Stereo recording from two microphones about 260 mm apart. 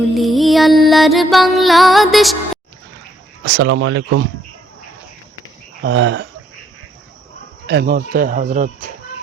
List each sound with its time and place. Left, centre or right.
0.1 s music: centre
3.4 s speech: right
5.8 s speech: right
7.7 s speech: right